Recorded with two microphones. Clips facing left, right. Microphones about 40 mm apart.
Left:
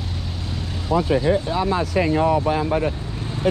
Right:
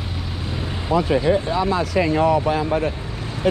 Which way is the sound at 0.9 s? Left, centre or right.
Right.